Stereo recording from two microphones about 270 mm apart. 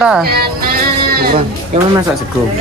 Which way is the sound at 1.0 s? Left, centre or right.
Right.